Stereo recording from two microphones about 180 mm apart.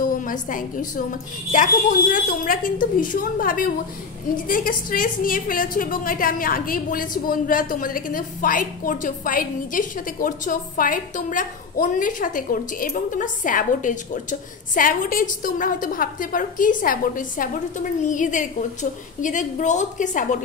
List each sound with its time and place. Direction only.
0.0 s a woman's voice: 50° left (ahead or behind)